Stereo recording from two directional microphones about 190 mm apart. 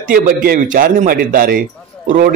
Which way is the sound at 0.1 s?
50° right (ahead or behind).